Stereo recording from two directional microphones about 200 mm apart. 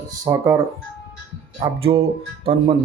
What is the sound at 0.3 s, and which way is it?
Speech, 15° right (ahead or behind).